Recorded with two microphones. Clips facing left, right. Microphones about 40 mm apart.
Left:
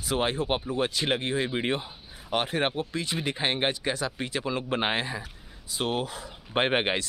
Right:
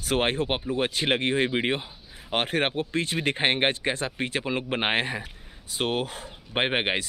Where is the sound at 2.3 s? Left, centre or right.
Right.